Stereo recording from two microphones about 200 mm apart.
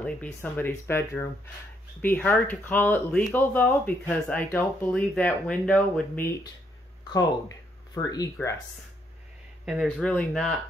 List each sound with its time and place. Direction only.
0.0 s speech: 10° left (ahead or behind)
7.1 s speech: 20° left (ahead or behind)
9.7 s speech: centre (ahead or behind)